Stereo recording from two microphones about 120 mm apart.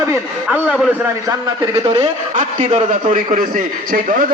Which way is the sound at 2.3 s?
90° right.